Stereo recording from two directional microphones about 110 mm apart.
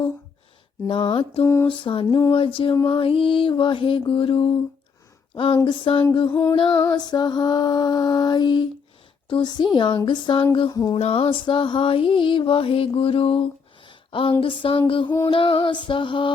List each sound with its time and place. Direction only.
0.9 s mantra: 50° left (ahead or behind)
1.4 s a sound: 25° left (ahead or behind)
1.6 s mantra: 50° left (ahead or behind)
5.3 s speech: 55° left (ahead or behind)
5.6 s mantra: 50° left (ahead or behind)
6.9 s mantra: 40° left (ahead or behind)
10.9 s mantra: 60° left (ahead or behind)